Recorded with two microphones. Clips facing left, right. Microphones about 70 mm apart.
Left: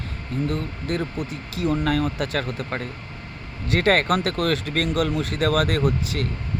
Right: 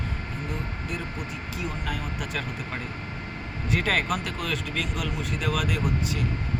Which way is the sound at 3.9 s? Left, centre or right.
Left.